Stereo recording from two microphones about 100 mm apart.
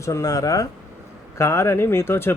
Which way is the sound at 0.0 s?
30° left (ahead or behind).